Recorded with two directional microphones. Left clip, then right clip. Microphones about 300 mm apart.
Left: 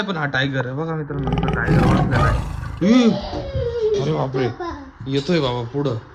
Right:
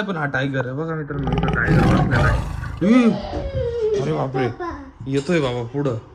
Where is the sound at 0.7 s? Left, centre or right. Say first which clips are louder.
Even; centre.